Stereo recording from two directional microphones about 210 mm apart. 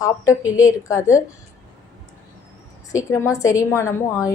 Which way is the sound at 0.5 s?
15° left (ahead or behind).